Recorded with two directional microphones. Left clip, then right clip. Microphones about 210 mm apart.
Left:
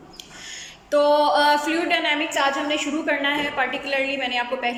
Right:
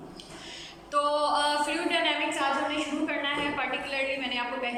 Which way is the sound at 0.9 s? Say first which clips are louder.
Left 8 dB; 35° left (ahead or behind).